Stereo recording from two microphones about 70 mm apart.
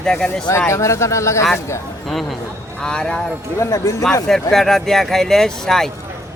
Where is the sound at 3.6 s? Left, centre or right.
Left.